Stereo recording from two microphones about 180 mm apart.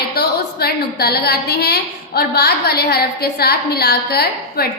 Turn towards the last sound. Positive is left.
turn(degrees=60)  # may be behind; listen again after turning